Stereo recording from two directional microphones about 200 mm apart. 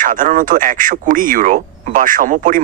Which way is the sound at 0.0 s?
40° right (ahead or behind).